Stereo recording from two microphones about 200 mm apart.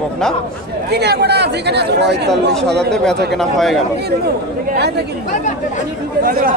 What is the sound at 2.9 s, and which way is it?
Speech, 5° left (ahead or behind).